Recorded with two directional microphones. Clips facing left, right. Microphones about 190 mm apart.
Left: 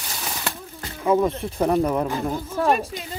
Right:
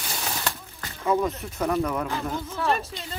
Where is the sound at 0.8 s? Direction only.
20° left (ahead or behind); by 2.7 s 45° left (ahead or behind).